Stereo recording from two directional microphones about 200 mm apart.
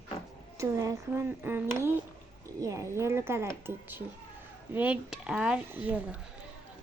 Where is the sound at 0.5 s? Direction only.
15° right (ahead or behind).